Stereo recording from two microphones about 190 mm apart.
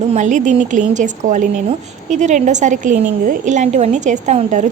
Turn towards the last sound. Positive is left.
turn(degrees=-40)  # may be behind; listen again after turning